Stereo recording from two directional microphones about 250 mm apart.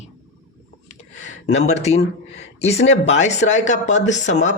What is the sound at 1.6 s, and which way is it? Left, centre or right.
Speech, left.